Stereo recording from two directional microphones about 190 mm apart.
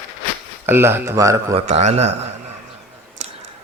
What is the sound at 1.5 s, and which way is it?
Speech, 35° right (ahead or behind).